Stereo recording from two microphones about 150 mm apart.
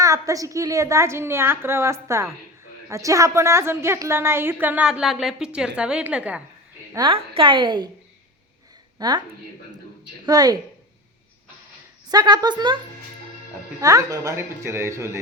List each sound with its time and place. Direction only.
0.0 s a woman's voice: 20° right (ahead or behind)
6.9 s a woman's voice: 35° right (ahead or behind)
9.0 s a woman's voice: 25° right (ahead or behind)
10.2 s a woman's voice: 25° right (ahead or behind)
12.1 s a woman's voice: 25° right (ahead or behind)
13.8 s a woman's voice: 20° right (ahead or behind)